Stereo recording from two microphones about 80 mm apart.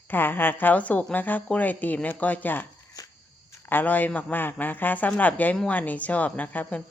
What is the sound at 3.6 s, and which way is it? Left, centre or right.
Speech, left.